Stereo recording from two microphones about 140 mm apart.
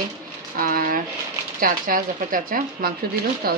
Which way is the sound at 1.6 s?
80° right.